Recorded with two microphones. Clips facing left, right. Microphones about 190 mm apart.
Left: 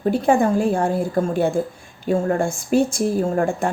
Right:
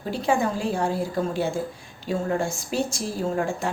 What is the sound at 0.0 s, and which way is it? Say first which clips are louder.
A woman's voice: left 7 dB; 55° left (ahead or behind).